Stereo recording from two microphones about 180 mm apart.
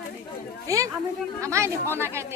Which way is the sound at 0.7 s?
20° right (ahead or behind).